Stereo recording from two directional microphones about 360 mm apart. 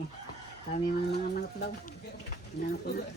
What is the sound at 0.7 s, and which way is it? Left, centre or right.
Speech, left.